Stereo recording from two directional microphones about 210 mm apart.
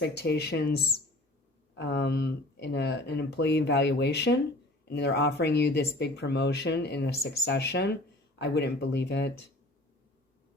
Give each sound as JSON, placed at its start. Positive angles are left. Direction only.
{"t": 0.0, "sound": "speech", "side_deg": 55}
{"t": 1.7, "sound": "speech", "side_deg": 55}